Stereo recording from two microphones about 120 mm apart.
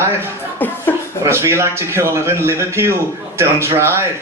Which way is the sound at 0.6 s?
15° left (ahead or behind).